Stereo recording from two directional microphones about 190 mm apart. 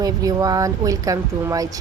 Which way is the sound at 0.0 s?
20° right (ahead or behind).